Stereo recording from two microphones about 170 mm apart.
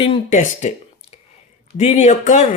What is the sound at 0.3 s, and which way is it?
Speech, 45° left (ahead or behind).